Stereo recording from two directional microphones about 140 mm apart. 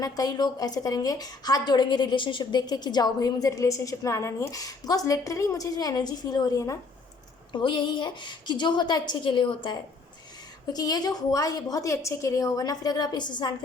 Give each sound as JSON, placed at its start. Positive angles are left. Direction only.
{"t": 0.0, "sound": "a woman's voice", "side_deg": 30}
{"t": 10.7, "sound": "a woman's voice", "side_deg": 30}